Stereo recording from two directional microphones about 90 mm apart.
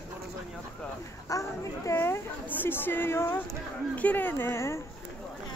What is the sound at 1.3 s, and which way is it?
Speech, 35° left (ahead or behind).